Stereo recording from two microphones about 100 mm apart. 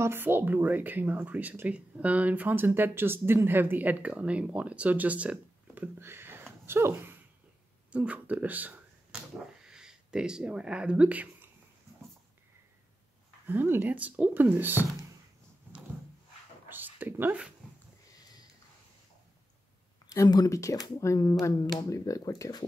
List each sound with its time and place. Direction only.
0.0 s speech: 20° right (ahead or behind)
13.5 s speech: 20° right (ahead or behind)
16.6 s a sound: 20° right (ahead or behind)
20.1 s speech: 40° left (ahead or behind)